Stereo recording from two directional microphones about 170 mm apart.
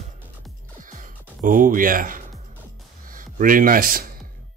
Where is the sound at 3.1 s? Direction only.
55° right (ahead or behind).